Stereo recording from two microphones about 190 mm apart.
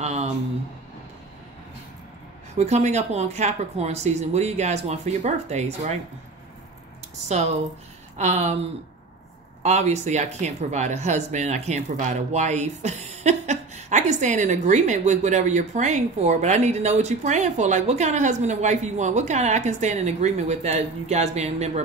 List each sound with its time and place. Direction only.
0.0 s a sound: 35° right (ahead or behind)
2.5 s speech: 35° right (ahead or behind)
8.2 s speech: 35° right (ahead or behind)
9.6 s speech: 35° right (ahead or behind)